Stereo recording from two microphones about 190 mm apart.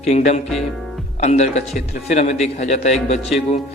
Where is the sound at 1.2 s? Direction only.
35° left (ahead or behind).